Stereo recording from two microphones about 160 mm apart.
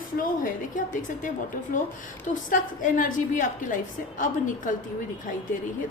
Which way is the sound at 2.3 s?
55° left (ahead or behind).